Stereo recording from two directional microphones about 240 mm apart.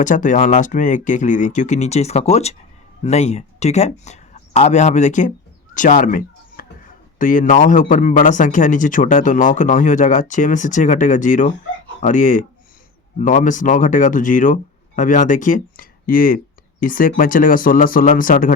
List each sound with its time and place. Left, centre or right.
0.0 s speech: left
5.7 s a sound: left
7.2 s speech: left